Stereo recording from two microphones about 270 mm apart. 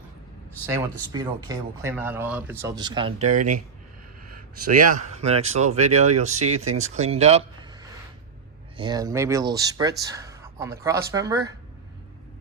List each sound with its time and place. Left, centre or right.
1.1 s speech: centre
3.2 s speech: right; by 11.5 s centre